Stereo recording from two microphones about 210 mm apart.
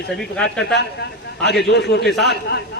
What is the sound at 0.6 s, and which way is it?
A man's voice, 55° left (ahead or behind).